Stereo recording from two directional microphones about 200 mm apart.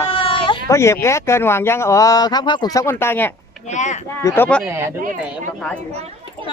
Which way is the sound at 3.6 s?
35° left (ahead or behind).